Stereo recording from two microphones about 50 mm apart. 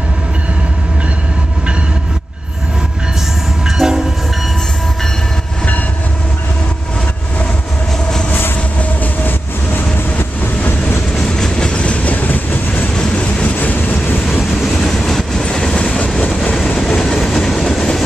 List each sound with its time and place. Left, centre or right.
3.6 s train: centre
8.3 s train: left
9.8 s train: left
11.1 s train: centre; by 12.8 s left
12.9 s train: centre
13.7 s train: left
14.9 s train: centre
15.7 s train: left
16.9 s train: centre